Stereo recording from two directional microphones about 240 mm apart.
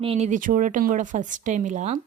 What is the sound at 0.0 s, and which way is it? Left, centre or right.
A woman's voice, right.